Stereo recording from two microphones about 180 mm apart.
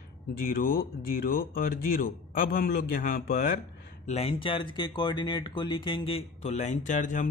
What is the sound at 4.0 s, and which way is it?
Speech, 35° left (ahead or behind).